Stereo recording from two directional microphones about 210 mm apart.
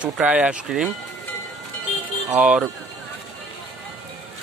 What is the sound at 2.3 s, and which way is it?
Speech, 5° right (ahead or behind).